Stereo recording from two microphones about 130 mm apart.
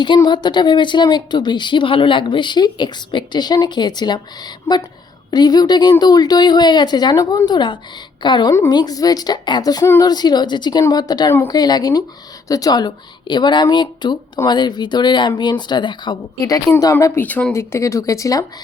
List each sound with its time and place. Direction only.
0.0 s a woman's voice: 35° left (ahead or behind)
16.4 s speech: 25° left (ahead or behind)